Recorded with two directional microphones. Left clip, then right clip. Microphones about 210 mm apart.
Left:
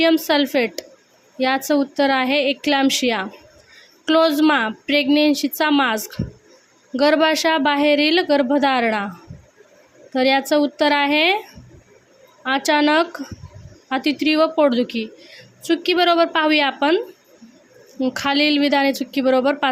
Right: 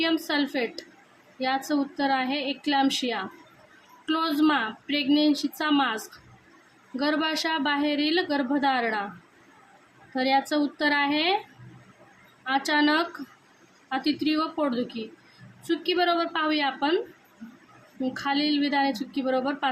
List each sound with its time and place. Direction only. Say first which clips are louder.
0.0 s a woman's voice: left 9 dB; 35° left (ahead or behind)
10.2 s a woman's voice: left 7 dB; 35° left (ahead or behind)
12.5 s a woman's voice: left 6 dB; 35° left (ahead or behind)
18.0 s a woman's voice: left 8 dB; 40° left (ahead or behind)